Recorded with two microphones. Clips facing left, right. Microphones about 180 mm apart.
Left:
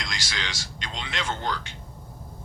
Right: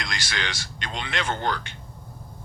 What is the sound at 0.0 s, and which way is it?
Speech, 55° right (ahead or behind).